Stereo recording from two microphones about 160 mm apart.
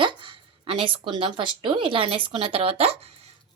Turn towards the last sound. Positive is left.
turn(degrees=-40)  # may be behind; listen again after turning